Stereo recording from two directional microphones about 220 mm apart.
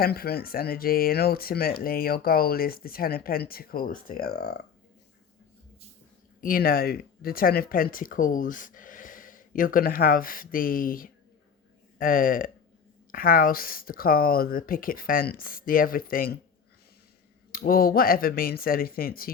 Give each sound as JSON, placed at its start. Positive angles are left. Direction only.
{"t": 0.0, "sound": "speech", "side_deg": 45}
{"t": 6.4, "sound": "speech", "side_deg": 40}
{"t": 17.5, "sound": "speech", "side_deg": 40}